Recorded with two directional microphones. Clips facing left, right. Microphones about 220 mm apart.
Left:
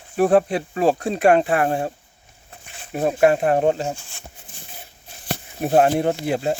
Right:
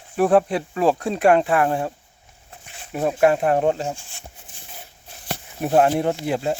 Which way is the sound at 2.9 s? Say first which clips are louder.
Left 1 dB; 40° left (ahead or behind).